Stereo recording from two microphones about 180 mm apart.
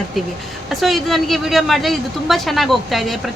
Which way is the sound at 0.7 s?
Centre (ahead or behind).